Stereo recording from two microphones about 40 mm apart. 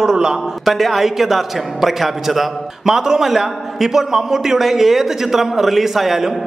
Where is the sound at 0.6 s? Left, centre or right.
Centre.